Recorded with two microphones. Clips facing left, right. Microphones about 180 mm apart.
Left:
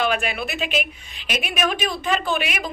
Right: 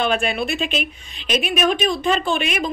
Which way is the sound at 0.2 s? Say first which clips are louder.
Right 4 dB; 30° right (ahead or behind).